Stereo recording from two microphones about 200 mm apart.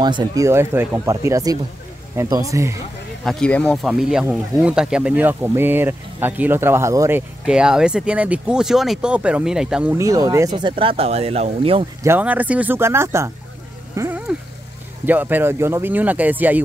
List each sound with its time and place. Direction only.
0.0 s speech: 20° right (ahead or behind)
3.3 s speech: 5° left (ahead or behind); by 11.8 s 30° right (ahead or behind)
12.0 s speech: 10° right (ahead or behind)
13.9 s a sound: 10° right (ahead or behind)
15.0 s speech: 10° right (ahead or behind)